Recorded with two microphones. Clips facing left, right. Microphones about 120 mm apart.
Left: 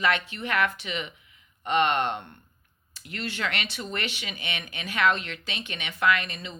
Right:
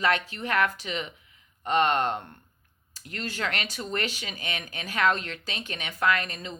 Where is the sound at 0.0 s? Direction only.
35° right (ahead or behind).